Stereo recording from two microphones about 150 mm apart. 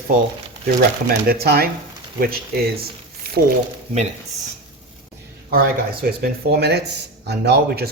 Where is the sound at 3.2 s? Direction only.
90° right.